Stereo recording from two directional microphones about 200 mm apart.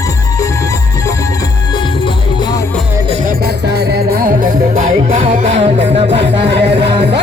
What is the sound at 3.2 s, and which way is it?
Music, 50° right (ahead or behind).